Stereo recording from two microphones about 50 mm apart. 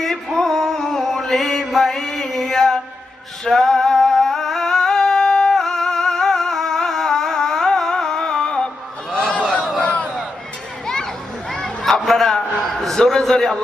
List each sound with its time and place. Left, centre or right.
0.0 s music: centre
9.8 s a sound: left
10.8 s children playing: centre